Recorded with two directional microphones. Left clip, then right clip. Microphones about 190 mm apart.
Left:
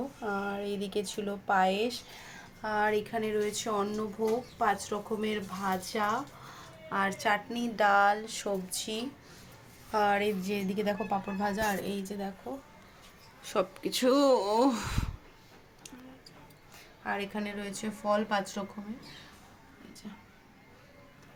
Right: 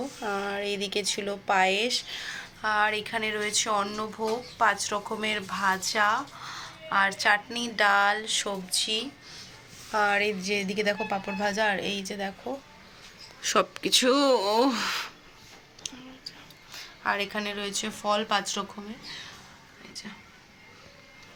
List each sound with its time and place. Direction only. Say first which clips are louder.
0.2 s a sound: right 4 dB; 10° right (ahead or behind)
0.4 s speech: right 5 dB; 5° left (ahead or behind)
4.2 s speech: right 4 dB; centre (ahead or behind); by 9.4 s 25° left (ahead or behind)
9.9 s speech: right 3 dB; 10° left (ahead or behind)
17.0 s speech: right 6 dB; centre (ahead or behind)